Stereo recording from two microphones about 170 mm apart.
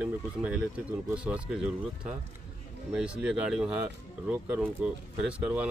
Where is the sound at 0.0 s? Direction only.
5° right (ahead or behind).